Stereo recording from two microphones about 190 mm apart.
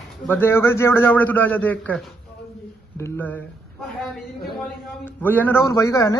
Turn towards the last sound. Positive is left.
turn(degrees=15)  # may be behind; listen again after turning